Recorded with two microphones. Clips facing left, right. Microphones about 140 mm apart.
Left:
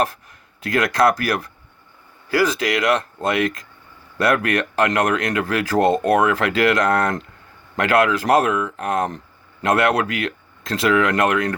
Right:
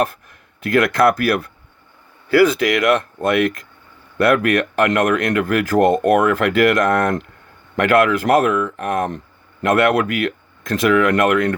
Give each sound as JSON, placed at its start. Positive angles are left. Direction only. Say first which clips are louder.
{"t": 0.0, "sound": "speech", "louder": "right 2 dB", "side_deg": -55}